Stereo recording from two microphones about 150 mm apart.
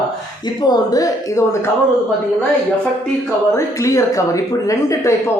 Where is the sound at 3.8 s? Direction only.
20° left (ahead or behind).